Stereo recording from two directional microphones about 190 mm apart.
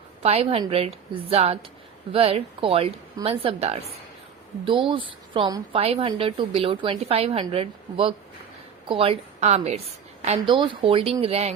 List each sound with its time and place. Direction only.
0.2 s a woman's voice: 30° right (ahead or behind)